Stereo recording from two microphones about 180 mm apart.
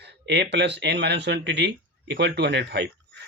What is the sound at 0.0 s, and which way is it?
Speech, 70° right (ahead or behind).